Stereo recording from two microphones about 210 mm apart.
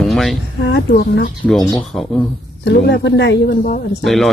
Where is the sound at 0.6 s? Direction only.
55° left (ahead or behind).